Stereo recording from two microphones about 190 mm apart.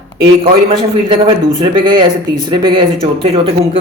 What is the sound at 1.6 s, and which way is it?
A man's voice, 25° right (ahead or behind).